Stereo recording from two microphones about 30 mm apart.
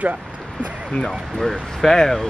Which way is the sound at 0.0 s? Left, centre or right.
Right.